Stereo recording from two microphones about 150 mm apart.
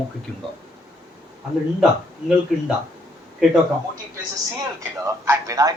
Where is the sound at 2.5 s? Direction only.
5° right (ahead or behind).